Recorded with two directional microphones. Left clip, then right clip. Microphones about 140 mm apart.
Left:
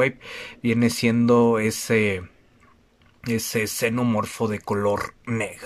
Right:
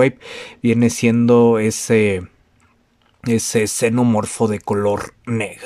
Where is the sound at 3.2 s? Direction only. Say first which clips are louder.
Right 7 dB; 25° right (ahead or behind).